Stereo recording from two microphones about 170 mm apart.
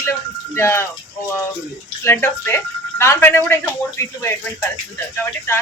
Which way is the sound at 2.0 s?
15° left (ahead or behind).